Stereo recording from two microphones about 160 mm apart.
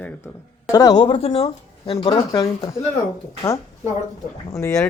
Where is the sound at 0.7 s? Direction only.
25° left (ahead or behind).